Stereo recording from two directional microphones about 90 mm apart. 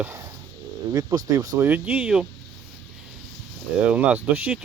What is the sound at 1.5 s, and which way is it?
Speech, 20° right (ahead or behind).